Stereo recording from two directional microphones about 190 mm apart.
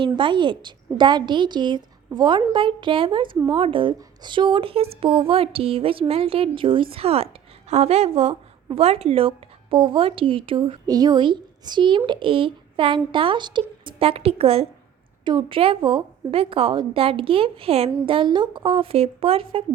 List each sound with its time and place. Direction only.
0.0 s speech: 25° right (ahead or behind)